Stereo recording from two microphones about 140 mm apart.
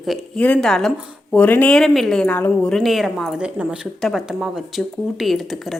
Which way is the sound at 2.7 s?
Centre (ahead or behind).